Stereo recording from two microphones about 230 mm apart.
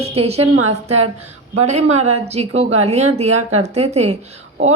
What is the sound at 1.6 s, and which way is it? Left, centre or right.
A woman's voice, right.